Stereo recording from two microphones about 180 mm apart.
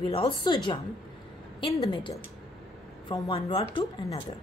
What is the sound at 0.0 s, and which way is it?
Speech, 25° left (ahead or behind).